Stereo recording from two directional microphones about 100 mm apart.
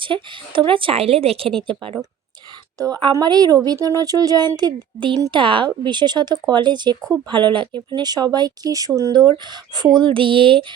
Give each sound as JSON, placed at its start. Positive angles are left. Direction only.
{"t": 0.0, "sound": "a woman's voice", "side_deg": -55}
{"t": 1.6, "sound": "a woman's voice", "side_deg": -55}
{"t": 2.7, "sound": "a woman's voice", "side_deg": -40}